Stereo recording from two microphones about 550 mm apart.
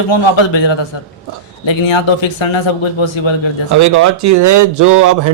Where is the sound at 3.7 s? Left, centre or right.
Right.